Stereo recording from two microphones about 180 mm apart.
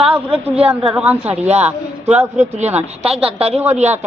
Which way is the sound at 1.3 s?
35° right (ahead or behind).